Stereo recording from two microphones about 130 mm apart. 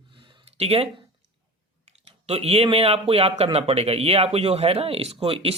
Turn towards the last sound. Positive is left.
turn(degrees=-45)  # may be behind; listen again after turning